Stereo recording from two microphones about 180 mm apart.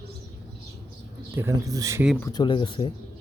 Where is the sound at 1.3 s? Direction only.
15° right (ahead or behind).